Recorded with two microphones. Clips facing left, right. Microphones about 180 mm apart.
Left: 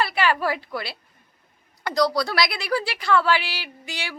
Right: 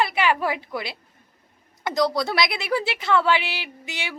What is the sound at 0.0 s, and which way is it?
A woman's voice, 20° right (ahead or behind).